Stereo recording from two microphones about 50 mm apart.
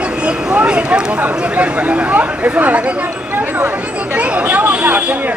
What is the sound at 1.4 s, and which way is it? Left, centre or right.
Speech, right.